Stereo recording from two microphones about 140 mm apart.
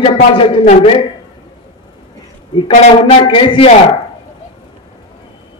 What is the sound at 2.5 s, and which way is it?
A man's voice, 40° left (ahead or behind).